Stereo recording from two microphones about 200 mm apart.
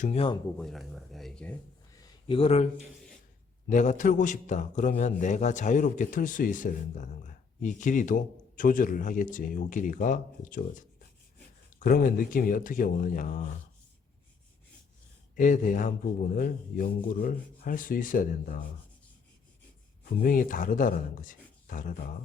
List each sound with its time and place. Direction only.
0.0 s speech: 30° left (ahead or behind)
0.6 s speech: centre (ahead or behind)
2.0 s a sound: 25° left (ahead or behind)
3.7 s a man's voice: 40° left (ahead or behind)
15.4 s a man's voice: 40° left (ahead or behind)
20.2 s speech: 40° left (ahead or behind)